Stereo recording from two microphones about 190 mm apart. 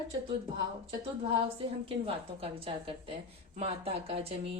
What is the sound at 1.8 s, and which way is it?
A woman's voice, 30° right (ahead or behind).